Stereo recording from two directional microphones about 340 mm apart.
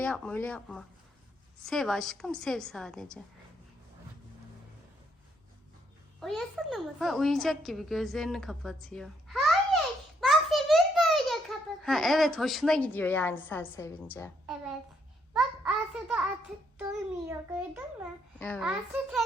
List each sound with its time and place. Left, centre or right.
0.0 s a woman's voice: centre
6.1 s a woman's voice: centre